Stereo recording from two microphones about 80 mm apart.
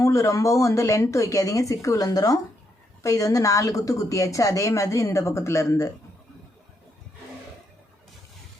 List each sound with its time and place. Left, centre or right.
0.0 s a woman's voice: left